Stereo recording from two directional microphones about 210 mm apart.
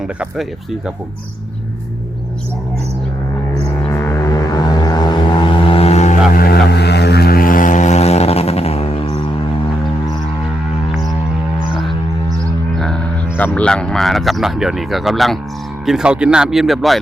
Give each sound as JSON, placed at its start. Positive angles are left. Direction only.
{"t": 0.0, "sound": "speech", "side_deg": 0}
{"t": 3.8, "sound": "vehicle", "side_deg": 15}
{"t": 12.7, "sound": "speech", "side_deg": 0}